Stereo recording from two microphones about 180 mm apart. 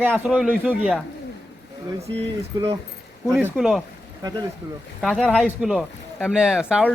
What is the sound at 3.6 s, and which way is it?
Speech, centre (ahead or behind).